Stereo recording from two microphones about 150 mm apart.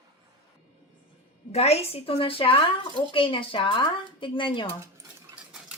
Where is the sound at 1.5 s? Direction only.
45° left (ahead or behind).